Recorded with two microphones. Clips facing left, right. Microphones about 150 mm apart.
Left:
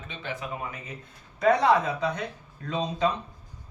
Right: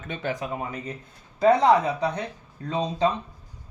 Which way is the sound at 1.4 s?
30° right (ahead or behind).